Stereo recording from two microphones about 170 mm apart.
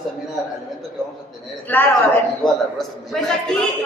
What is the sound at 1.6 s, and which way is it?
A man's voice, 10° left (ahead or behind).